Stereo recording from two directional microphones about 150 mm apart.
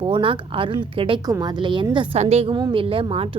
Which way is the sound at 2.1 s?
45° right (ahead or behind).